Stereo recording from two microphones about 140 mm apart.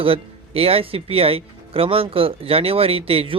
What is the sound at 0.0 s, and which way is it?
Speech, 40° right (ahead or behind).